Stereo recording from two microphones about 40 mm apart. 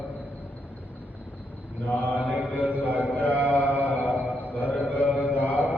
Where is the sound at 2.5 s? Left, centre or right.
Right.